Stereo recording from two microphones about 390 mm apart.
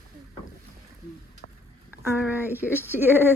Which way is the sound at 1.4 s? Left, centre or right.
Left.